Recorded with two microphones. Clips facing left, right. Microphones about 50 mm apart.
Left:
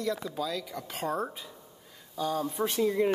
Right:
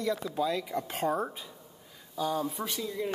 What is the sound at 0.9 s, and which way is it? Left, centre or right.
Speech, centre.